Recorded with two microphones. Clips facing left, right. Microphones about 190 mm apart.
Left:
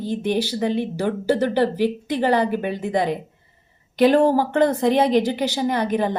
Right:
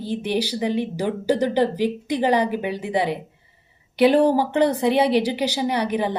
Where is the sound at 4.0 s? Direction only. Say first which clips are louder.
Even; 45° left (ahead or behind).